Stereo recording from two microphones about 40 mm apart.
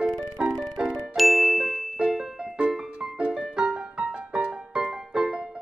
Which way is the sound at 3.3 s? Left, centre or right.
Right.